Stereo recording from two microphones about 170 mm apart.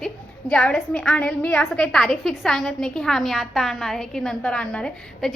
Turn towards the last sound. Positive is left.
turn(degrees=5)  # may be behind; listen again after turning